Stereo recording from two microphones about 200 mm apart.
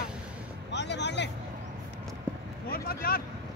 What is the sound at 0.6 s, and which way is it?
Vehicle, 60° left (ahead or behind).